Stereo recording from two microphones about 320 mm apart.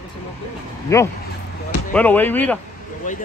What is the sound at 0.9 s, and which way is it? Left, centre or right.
Speech, centre.